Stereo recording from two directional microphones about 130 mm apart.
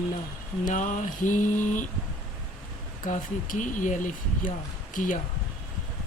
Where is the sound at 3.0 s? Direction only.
90° left.